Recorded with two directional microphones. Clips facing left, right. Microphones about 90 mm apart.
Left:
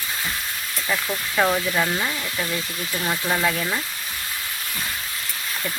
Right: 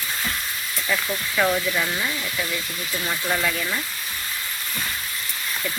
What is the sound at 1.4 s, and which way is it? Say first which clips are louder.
Speech: left 1 dB; 25° left (ahead or behind).